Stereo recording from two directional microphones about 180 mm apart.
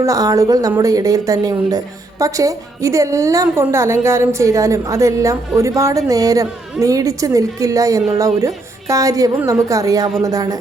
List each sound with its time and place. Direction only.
0.0 s a woman's voice: 20° right (ahead or behind)